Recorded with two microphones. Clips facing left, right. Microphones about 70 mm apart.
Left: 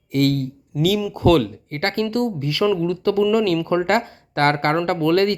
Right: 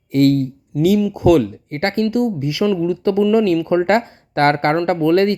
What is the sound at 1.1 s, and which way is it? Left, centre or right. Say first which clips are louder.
Speech: even; centre.